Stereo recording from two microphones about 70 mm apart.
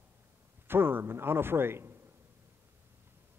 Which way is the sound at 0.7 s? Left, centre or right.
Right.